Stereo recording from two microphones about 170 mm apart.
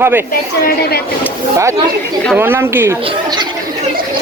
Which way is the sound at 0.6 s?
70° left (ahead or behind).